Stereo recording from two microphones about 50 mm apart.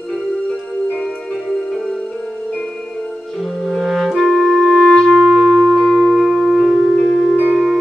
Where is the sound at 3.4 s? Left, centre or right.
Centre.